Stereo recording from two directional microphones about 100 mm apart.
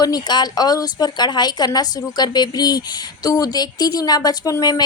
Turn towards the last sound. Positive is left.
turn(degrees=40)  # may be behind; listen again after turning